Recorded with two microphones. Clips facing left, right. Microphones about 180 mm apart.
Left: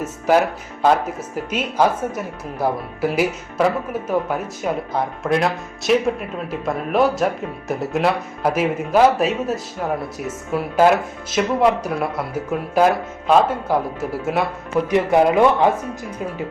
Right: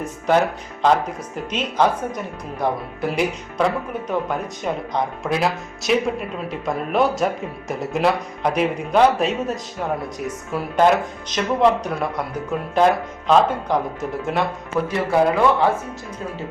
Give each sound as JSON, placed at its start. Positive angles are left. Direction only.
{"t": 0.0, "sound": "speech", "side_deg": 5}
{"t": 14.8, "sound": "a man's voice", "side_deg": 20}